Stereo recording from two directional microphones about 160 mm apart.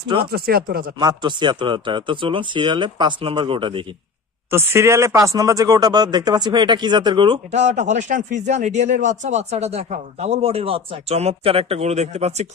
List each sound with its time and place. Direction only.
0.2 s speech: 75° right (ahead or behind)
0.9 s speech: 25° right (ahead or behind)
4.5 s speech: 15° right (ahead or behind)
7.5 s speech: 45° right (ahead or behind)